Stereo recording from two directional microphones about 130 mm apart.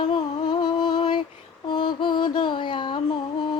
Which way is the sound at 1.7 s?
35° left (ahead or behind).